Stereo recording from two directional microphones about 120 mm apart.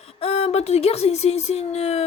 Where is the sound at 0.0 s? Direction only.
55° left (ahead or behind).